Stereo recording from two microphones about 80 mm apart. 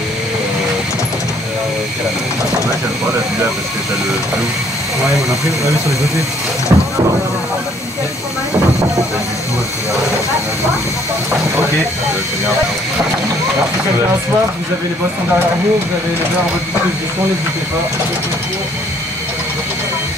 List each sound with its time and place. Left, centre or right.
6.7 s boat: right